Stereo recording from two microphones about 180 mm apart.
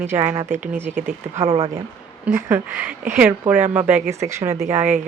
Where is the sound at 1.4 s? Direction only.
30° right (ahead or behind).